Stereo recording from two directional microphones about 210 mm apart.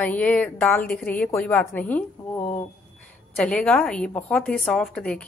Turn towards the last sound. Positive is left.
turn(degrees=5)  # may be behind; listen again after turning